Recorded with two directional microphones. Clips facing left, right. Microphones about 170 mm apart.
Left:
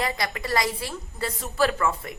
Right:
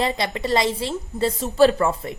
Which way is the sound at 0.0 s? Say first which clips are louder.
Right 5 dB; 25° right (ahead or behind).